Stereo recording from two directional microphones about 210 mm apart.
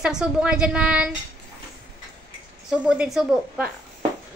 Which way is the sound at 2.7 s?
5° right (ahead or behind).